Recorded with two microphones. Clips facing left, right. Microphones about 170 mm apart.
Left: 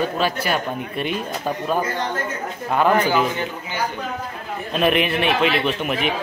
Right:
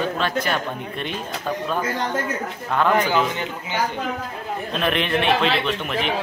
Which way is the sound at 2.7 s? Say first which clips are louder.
Left 2 dB; 10° left (ahead or behind).